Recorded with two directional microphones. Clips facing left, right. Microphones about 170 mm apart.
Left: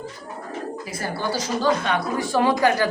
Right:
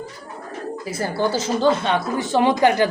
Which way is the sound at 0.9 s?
25° right (ahead or behind).